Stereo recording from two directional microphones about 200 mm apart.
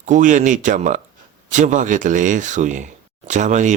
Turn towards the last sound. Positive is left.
turn(degrees=-35)  # may be behind; listen again after turning